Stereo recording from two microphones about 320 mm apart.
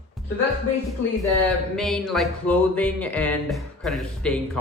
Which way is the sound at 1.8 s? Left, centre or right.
Centre.